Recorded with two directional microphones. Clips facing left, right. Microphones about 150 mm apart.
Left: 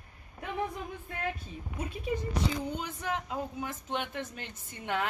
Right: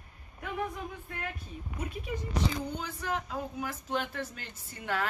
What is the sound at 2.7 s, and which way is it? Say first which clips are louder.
Speech: even; 20° left (ahead or behind).